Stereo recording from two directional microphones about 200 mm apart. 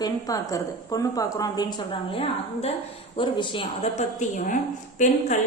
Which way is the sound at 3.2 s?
25° left (ahead or behind).